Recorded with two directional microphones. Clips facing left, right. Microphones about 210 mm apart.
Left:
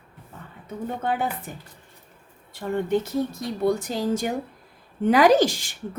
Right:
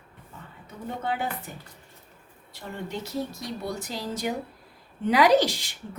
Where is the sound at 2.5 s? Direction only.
50° left (ahead or behind).